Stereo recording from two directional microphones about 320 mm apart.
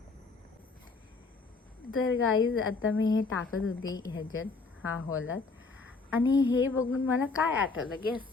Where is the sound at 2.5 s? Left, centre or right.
Left.